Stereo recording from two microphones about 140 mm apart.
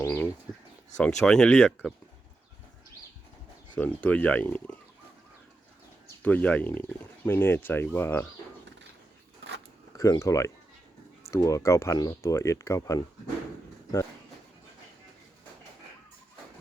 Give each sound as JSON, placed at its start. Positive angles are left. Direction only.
{"t": 0.0, "sound": "a sound", "side_deg": 20}
{"t": 0.9, "sound": "speech", "side_deg": 5}
{"t": 3.8, "sound": "speech", "side_deg": 10}
{"t": 6.2, "sound": "speech", "side_deg": 10}
{"t": 10.0, "sound": "speech", "side_deg": 25}